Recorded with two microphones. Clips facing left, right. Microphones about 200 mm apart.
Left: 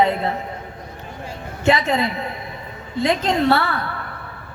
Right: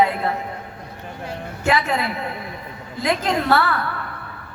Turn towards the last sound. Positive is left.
turn(degrees=25)  # may be behind; listen again after turning